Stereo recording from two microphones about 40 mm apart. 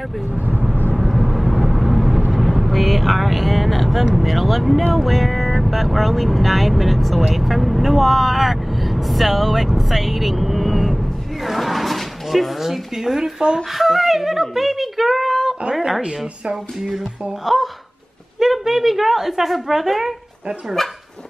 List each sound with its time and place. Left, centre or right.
0.3 s vehicle: right
0.9 s vehicle: centre
4.0 s speech: centre
17.3 s speech: centre